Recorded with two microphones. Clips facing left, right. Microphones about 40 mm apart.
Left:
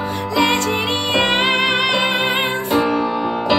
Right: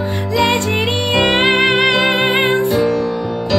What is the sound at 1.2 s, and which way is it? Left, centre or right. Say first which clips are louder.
Music: right 4 dB; centre.